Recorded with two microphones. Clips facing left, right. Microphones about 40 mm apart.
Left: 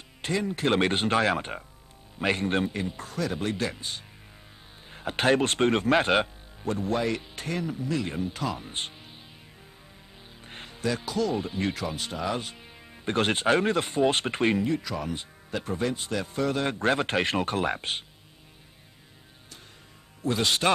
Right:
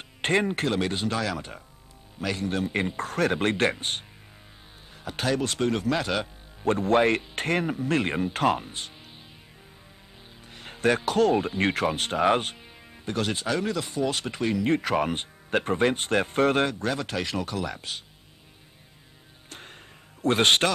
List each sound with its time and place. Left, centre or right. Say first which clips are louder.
0.2 s speech: right 5 dB; right
0.7 s speech: left 3 dB; left
3.0 s speech: right 7 dB; right
4.9 s speech: left 4 dB; left
6.6 s speech: right 6 dB; right
10.7 s music: right 6 dB; right
11.1 s speech: right 6 dB; right
13.0 s speech: left 4 dB; left
14.6 s speech: right 5 dB; right
16.6 s speech: left 3 dB; left
20.2 s speech: right 5 dB; right